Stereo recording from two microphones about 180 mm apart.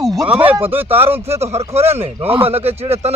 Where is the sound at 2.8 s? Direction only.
35° right (ahead or behind).